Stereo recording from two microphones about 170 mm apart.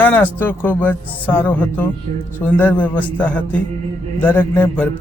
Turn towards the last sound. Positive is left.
turn(degrees=10)  # may be behind; listen again after turning